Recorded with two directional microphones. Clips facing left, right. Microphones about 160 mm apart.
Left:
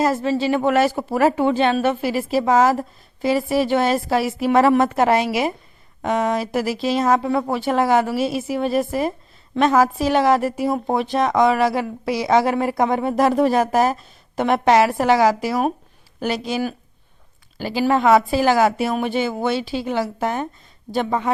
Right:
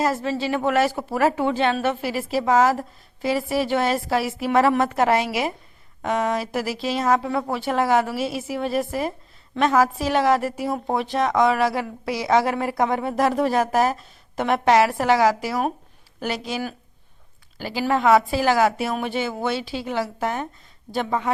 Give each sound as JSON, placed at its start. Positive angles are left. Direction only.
{"t": 0.0, "sound": "speech", "side_deg": 25}